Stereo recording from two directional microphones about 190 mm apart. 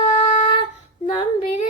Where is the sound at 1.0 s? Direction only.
25° left (ahead or behind).